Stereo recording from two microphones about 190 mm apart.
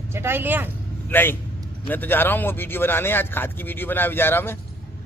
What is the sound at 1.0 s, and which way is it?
A man's voice, 10° left (ahead or behind).